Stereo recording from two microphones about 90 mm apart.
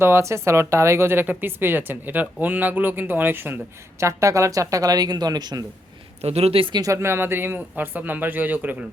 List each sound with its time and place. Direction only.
0.0 s speech: 30° right (ahead or behind)
4.0 s speech: 35° right (ahead or behind)
6.4 s speech: 85° right
6.7 s speech: 35° right (ahead or behind); by 8.7 s 20° right (ahead or behind)